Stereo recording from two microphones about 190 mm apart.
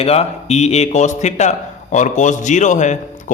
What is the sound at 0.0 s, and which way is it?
A man's voice, 30° left (ahead or behind).